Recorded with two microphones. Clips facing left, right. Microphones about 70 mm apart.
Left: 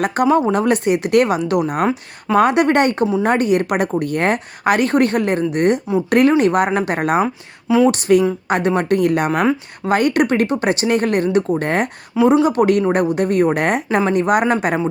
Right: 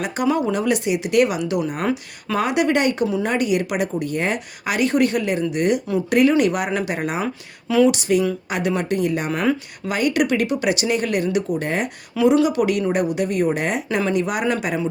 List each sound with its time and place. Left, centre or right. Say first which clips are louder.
0.0 s speech: left 5 dB; left
1.9 s speech: left 5 dB; left
2.4 s speech: left 5 dB; left
9.8 s speech: left 5 dB; left
12.1 s speech: left 3 dB; left